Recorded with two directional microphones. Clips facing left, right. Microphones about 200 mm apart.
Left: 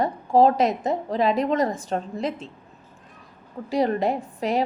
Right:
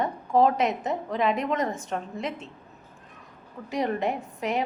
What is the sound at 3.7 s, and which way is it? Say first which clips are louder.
Speech: left 5 dB; 35° left (ahead or behind).